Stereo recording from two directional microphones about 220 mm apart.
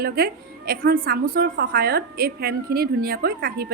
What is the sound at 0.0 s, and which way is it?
A woman's voice, 45° right (ahead or behind).